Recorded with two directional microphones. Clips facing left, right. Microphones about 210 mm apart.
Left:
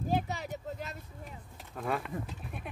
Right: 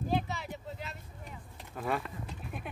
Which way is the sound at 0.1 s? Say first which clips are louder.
Left 2 dB; 45° left (ahead or behind).